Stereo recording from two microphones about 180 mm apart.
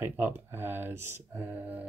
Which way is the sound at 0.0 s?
10° right (ahead or behind).